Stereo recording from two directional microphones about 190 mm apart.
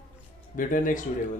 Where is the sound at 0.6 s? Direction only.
45° left (ahead or behind).